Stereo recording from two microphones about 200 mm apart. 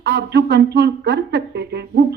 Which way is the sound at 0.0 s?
55° right (ahead or behind).